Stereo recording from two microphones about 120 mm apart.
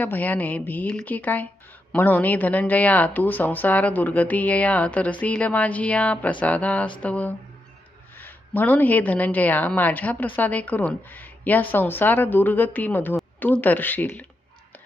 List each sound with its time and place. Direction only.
0.0 s speech: 15° left (ahead or behind)